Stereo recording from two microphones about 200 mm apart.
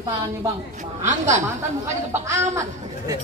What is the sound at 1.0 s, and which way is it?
Speech, 35° right (ahead or behind).